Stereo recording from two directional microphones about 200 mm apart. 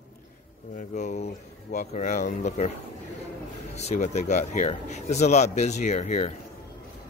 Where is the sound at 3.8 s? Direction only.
35° left (ahead or behind).